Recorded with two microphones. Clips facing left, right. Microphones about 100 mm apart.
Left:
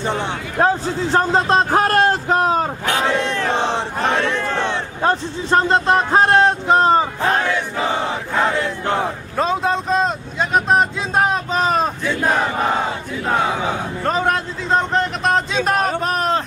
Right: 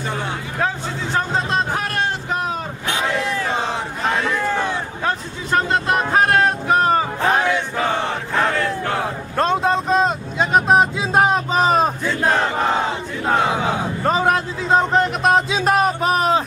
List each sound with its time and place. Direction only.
0.6 s a man's voice: 40° left (ahead or behind)
3.2 s a sound: 5° right (ahead or behind)
3.5 s battle cry: 30° left (ahead or behind)
4.0 s crowd: centre (ahead or behind)
4.6 s a man's voice: 30° left (ahead or behind)
7.3 s battle cry: 15° right (ahead or behind)
8.4 s battle cry: 15° left (ahead or behind)
8.9 s vehicle: centre (ahead or behind)
12.1 s battle cry: 5° left (ahead or behind)
13.5 s a man's voice: 5° right (ahead or behind)